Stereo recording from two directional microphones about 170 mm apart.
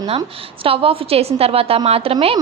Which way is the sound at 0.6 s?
35° right (ahead or behind).